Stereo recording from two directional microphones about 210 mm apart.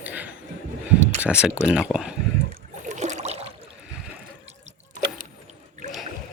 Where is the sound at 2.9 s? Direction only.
35° right (ahead or behind).